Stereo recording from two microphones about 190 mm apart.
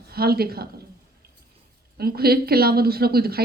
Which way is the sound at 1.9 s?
55° right (ahead or behind).